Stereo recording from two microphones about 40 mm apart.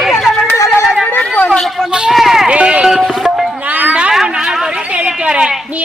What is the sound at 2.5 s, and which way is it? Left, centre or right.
Music, right.